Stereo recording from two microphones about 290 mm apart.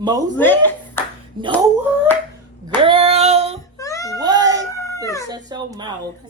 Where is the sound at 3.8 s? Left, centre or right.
Centre.